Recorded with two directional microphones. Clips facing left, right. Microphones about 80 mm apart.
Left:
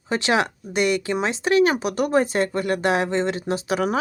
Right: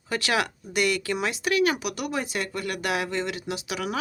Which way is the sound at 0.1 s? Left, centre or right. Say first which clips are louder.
Left 5 dB; left.